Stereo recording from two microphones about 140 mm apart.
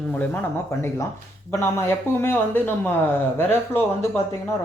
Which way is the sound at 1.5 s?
20° left (ahead or behind).